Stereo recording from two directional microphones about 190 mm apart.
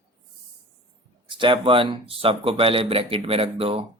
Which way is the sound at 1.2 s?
25° right (ahead or behind).